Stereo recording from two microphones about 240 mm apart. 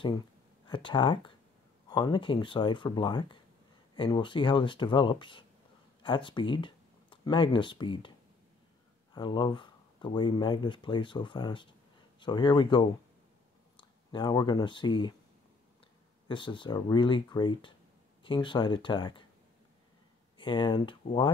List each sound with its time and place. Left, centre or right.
0.7 s speech: left
9.1 s speech: centre
16.3 s speech: centre
20.3 s speech: centre